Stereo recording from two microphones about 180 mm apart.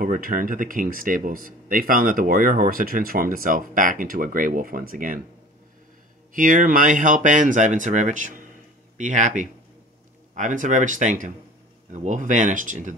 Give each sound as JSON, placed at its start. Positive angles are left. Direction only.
{"t": 0.0, "sound": "speech", "side_deg": -50}
{"t": 6.3, "sound": "speech", "side_deg": -50}